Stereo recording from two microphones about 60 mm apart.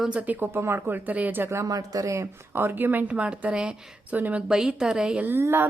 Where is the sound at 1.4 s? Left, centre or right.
Right.